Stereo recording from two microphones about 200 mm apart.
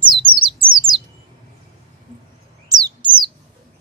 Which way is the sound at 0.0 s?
25° right (ahead or behind).